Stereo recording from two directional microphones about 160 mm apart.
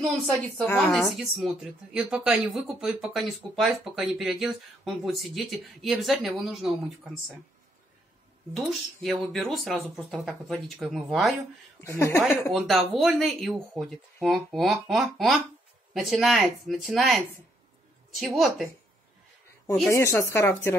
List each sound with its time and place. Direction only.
0.0 s speech: 5° left (ahead or behind)
8.5 s speech: centre (ahead or behind)
11.8 s speech: 15° left (ahead or behind)
12.2 s speech: centre (ahead or behind)
19.9 s speech: 15° left (ahead or behind)